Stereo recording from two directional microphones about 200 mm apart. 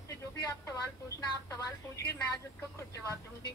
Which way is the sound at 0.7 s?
15° left (ahead or behind).